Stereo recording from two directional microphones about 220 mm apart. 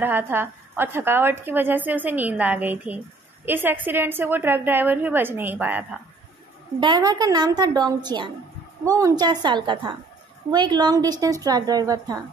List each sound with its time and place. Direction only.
0.0 s a woman's voice: 10° right (ahead or behind)
6.8 s a woman's voice: 20° right (ahead or behind)